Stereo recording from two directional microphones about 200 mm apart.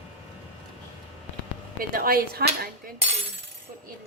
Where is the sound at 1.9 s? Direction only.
45° right (ahead or behind).